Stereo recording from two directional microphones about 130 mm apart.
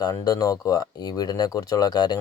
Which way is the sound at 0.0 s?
30° left (ahead or behind).